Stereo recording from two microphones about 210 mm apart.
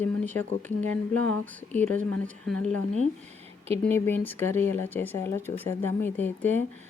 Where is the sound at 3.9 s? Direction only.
10° left (ahead or behind).